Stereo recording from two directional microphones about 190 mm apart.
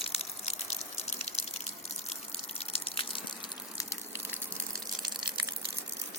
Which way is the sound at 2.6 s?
30° left (ahead or behind).